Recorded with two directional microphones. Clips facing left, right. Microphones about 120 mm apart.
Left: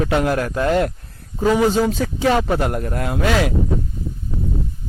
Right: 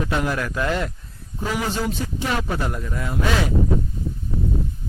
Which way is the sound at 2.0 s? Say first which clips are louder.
Left 6 dB; 90° left.